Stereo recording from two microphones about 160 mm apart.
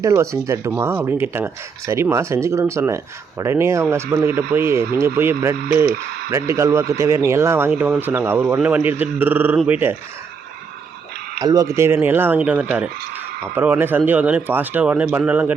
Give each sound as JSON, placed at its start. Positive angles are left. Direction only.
{"t": 0.0, "sound": "speech", "side_deg": -20}
{"t": 11.3, "sound": "speech", "side_deg": -20}